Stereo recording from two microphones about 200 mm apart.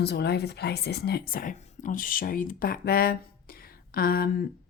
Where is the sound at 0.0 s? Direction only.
55° left (ahead or behind).